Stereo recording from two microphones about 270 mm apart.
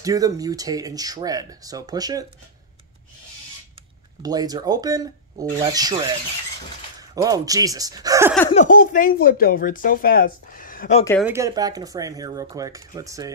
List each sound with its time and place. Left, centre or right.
0.0 s speech: centre
4.2 s speech: centre
8.5 s speech: left
11.2 s speech: centre